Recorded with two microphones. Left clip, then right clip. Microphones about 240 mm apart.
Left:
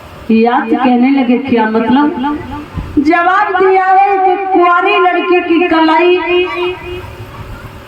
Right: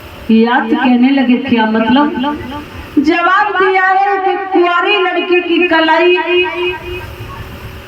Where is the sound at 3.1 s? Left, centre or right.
Right.